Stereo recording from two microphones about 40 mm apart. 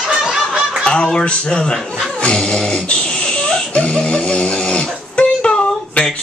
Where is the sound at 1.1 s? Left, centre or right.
Left.